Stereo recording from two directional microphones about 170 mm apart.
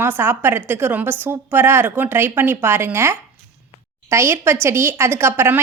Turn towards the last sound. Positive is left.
turn(degrees=-15)  # may be behind; listen again after turning